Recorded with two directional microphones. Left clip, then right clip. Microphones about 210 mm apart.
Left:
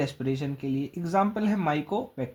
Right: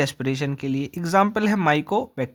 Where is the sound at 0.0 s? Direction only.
35° right (ahead or behind).